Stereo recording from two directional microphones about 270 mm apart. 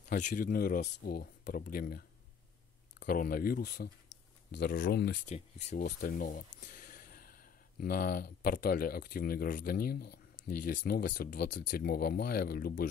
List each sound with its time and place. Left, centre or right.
0.1 s speech: left
5.3 s speech: left